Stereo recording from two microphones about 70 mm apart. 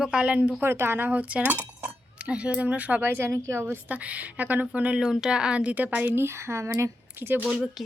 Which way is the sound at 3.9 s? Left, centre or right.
Right.